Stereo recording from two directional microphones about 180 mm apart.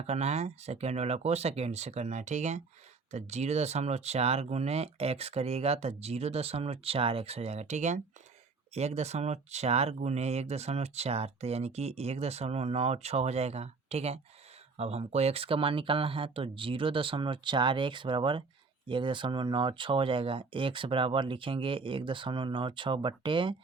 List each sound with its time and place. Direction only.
0.0 s speech: 40° right (ahead or behind)